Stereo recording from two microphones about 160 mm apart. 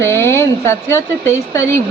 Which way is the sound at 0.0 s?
15° left (ahead or behind).